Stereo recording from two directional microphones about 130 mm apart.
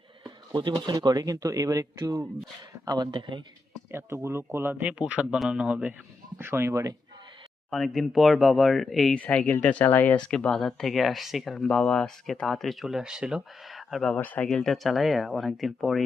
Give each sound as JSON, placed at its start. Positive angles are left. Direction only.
{"t": 0.5, "sound": "speech", "side_deg": -35}
{"t": 3.9, "sound": "speech", "side_deg": -20}
{"t": 7.7, "sound": "speech", "side_deg": 0}
{"t": 9.1, "sound": "speech", "side_deg": 10}
{"t": 14.2, "sound": "speech", "side_deg": 10}
{"t": 14.4, "sound": "speech", "side_deg": 0}